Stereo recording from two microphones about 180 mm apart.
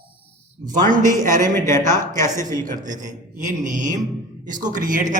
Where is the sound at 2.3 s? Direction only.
20° right (ahead or behind).